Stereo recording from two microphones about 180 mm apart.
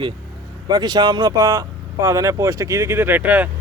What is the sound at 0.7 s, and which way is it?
Speech, 20° right (ahead or behind).